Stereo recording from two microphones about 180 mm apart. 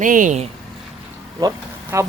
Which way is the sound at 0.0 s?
45° right (ahead or behind).